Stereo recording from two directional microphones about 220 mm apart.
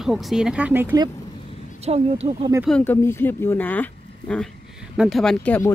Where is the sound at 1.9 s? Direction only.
30° right (ahead or behind).